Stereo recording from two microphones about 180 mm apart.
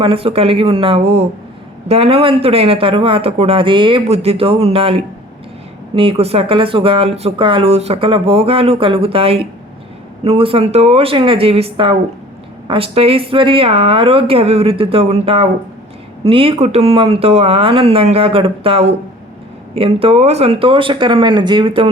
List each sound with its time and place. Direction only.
0.0 s speech: 30° right (ahead or behind)